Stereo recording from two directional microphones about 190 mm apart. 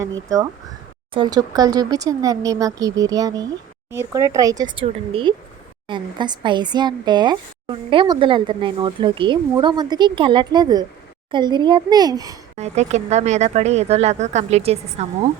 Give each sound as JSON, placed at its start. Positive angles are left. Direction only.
{"t": 1.1, "sound": "speech", "side_deg": -20}
{"t": 12.5, "sound": "speech", "side_deg": -35}